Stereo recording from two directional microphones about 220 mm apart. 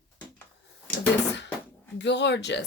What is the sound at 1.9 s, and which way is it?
Speech, 50° left (ahead or behind).